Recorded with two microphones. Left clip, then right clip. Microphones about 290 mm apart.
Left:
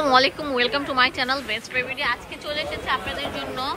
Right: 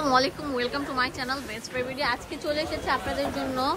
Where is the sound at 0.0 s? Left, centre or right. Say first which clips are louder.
Left 5 dB; centre.